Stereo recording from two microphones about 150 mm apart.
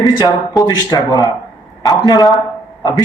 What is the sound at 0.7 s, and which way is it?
A man's voice, 25° left (ahead or behind).